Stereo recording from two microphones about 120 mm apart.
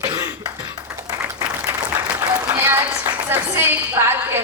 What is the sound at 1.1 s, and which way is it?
Applause, 20° right (ahead or behind).